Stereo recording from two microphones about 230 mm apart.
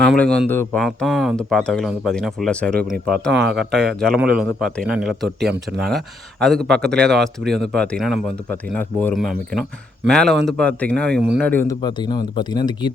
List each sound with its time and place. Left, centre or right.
0.0 s speech: centre
11.8 s speech: centre